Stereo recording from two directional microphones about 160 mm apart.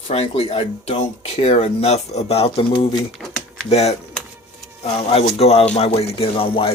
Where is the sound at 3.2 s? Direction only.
5° left (ahead or behind).